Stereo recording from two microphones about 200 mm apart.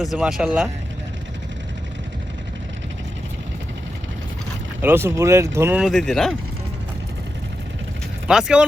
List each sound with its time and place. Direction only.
0.0 s speech: centre (ahead or behind)
4.8 s speech: 10° right (ahead or behind)
8.3 s speech: 5° right (ahead or behind)